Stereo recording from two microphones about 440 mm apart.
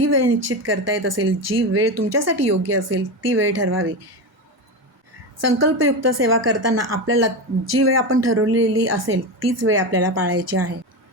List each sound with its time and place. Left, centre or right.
0.0 s speech: right
5.5 s speech: right